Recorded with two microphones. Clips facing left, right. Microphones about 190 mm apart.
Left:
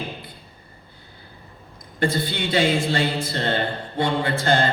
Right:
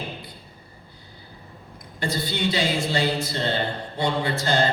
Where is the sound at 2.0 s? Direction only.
55° left (ahead or behind).